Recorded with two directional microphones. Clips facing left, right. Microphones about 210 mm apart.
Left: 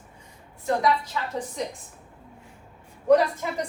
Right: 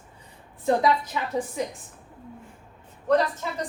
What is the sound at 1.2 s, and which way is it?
Speech, 20° right (ahead or behind).